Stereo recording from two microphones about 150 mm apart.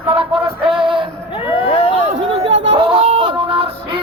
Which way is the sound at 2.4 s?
35° right (ahead or behind).